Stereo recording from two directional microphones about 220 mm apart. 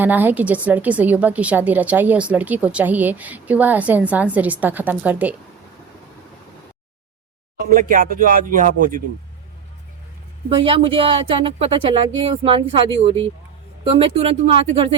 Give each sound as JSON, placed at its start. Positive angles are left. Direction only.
{"t": 0.0, "sound": "a woman's voice", "side_deg": -10}
{"t": 7.6, "sound": "speech", "side_deg": -40}
{"t": 10.5, "sound": "speech", "side_deg": -25}